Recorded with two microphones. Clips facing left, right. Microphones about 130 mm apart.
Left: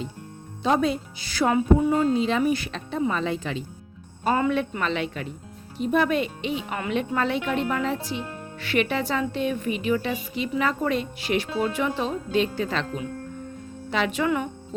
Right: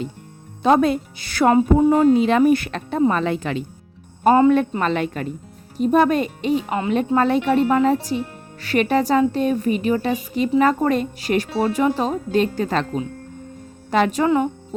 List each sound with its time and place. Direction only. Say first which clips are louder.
0.6 s speech: right 6 dB; 55° right (ahead or behind)
4.4 s a woman's voice: right 8 dB; 35° right (ahead or behind)